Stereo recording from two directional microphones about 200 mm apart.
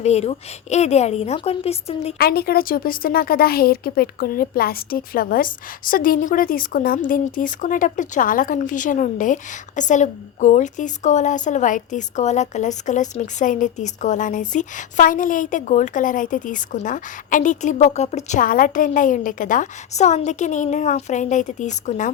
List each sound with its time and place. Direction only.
0.0 s speech: 35° left (ahead or behind)
2.1 s speech: 50° left (ahead or behind)